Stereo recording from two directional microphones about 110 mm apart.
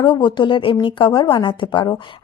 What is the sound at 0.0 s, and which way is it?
A woman's voice, 45° left (ahead or behind).